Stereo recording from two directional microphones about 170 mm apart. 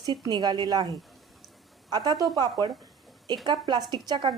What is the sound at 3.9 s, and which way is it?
Speech, 25° right (ahead or behind).